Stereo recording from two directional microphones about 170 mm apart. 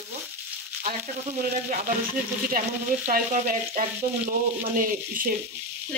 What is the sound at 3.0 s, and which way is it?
Frying, 50° right (ahead or behind).